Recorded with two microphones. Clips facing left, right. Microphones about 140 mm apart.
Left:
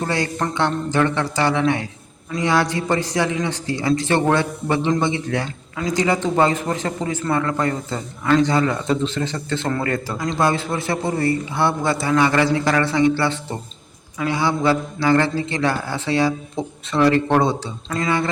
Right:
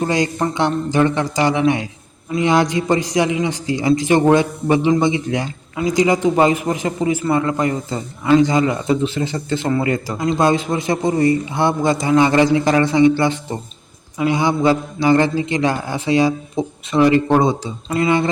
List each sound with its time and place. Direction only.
0.0 s a man's voice: 15° right (ahead or behind)